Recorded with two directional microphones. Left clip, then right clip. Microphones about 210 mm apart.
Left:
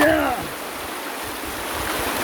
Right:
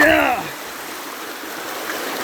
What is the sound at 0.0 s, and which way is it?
Rain, 25° right (ahead or behind).